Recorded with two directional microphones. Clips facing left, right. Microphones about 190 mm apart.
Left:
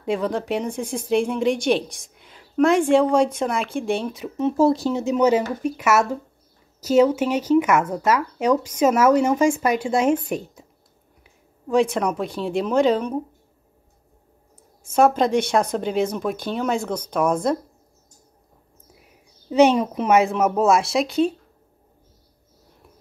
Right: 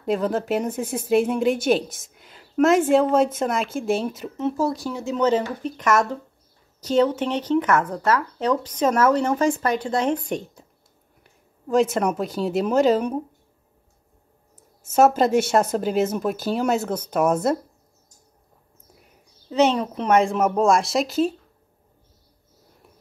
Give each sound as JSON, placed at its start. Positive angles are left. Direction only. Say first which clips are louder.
{"t": 0.0, "sound": "speech", "louder": "right 1 dB", "side_deg": 0}
{"t": 4.4, "sound": "speech", "louder": "left 6 dB", "side_deg": 20}
{"t": 5.1, "sound": "speech", "louder": "left 1 dB", "side_deg": 10}
{"t": 14.9, "sound": "speech", "louder": "even", "side_deg": -5}
{"t": 19.5, "sound": "speech", "louder": "left 4 dB", "side_deg": 10}